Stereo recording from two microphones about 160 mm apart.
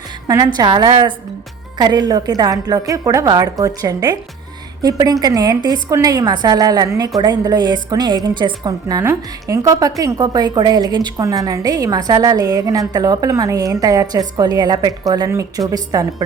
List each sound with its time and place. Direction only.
0.5 s a woman's voice: 25° right (ahead or behind)